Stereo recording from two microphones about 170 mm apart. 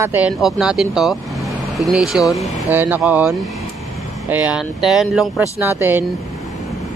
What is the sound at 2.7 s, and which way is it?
Speech, 10° right (ahead or behind).